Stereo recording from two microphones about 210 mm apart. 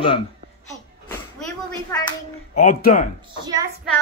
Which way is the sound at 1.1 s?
10° left (ahead or behind).